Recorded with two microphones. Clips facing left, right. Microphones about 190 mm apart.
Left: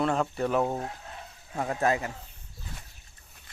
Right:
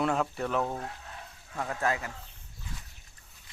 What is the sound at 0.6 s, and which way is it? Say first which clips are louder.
A man's voice: left 4 dB; 20° left (ahead or behind).